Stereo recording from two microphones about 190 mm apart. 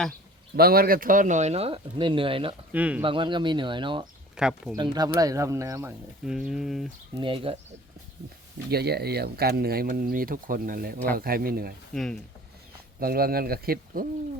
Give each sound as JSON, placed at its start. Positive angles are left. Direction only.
{"t": 0.1, "sound": "speech", "side_deg": -55}
{"t": 2.7, "sound": "speech", "side_deg": -5}
{"t": 3.0, "sound": "speech", "side_deg": -25}
{"t": 4.4, "sound": "speech", "side_deg": -5}
{"t": 4.8, "sound": "speech", "side_deg": -20}
{"t": 6.2, "sound": "speech", "side_deg": -5}
{"t": 7.2, "sound": "speech", "side_deg": -30}
{"t": 8.7, "sound": "speech", "side_deg": -55}
{"t": 11.9, "sound": "speech", "side_deg": 0}
{"t": 13.0, "sound": "speech", "side_deg": -50}